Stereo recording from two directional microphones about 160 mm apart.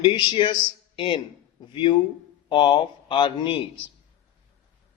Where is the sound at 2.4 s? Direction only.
30° left (ahead or behind).